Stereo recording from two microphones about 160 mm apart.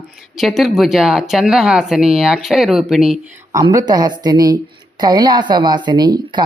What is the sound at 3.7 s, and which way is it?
A woman's voice, 25° right (ahead or behind).